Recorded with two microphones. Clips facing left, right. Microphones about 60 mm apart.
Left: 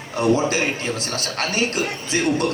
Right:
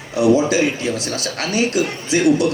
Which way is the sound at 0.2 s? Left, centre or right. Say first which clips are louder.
Right 4 dB; left.